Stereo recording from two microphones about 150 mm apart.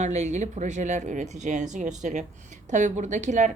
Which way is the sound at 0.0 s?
50° right (ahead or behind).